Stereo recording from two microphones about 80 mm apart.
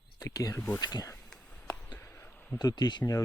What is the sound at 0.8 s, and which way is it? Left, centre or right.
Speech, left.